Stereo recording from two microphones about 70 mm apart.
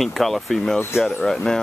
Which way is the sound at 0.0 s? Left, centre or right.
Centre.